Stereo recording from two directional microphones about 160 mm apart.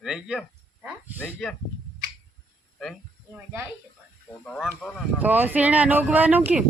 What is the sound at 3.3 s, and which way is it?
Speech, 15° right (ahead or behind).